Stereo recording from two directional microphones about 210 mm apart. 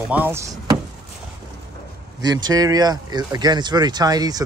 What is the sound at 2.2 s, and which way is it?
Speech, 20° right (ahead or behind).